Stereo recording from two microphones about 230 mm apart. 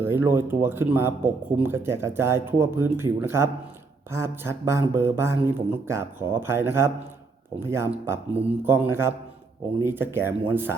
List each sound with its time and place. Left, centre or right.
0.0 s speech: centre